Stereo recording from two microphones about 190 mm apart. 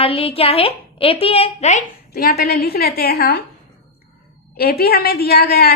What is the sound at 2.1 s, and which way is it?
A woman's voice, 55° left (ahead or behind).